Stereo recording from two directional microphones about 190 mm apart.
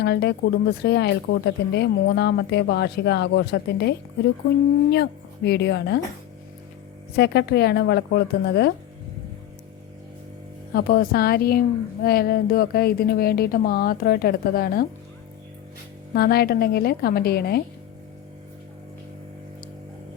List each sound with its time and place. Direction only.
0.0 s speech: 60° left (ahead or behind)
5.5 s speech: 60° left (ahead or behind)
7.2 s speech: 60° left (ahead or behind)
10.8 s speech: 55° left (ahead or behind)
16.1 s speech: 55° left (ahead or behind)